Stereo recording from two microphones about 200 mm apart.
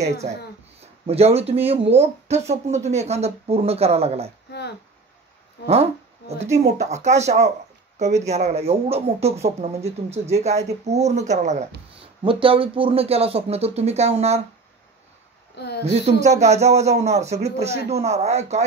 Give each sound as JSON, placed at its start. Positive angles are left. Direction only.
{"t": 1.0, "sound": "speech", "side_deg": -30}
{"t": 4.5, "sound": "a sound", "side_deg": 55}
{"t": 5.7, "sound": "speech", "side_deg": -30}
{"t": 15.5, "sound": "a woman's voice", "side_deg": 55}
{"t": 15.8, "sound": "speech", "side_deg": -30}